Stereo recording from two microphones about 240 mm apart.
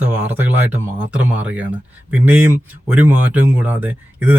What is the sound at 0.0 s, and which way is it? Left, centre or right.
Speech, centre.